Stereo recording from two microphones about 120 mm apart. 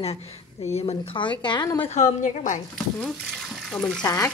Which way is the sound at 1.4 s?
35° left (ahead or behind).